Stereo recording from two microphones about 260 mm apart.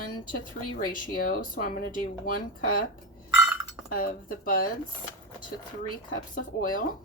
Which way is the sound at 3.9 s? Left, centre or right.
Left.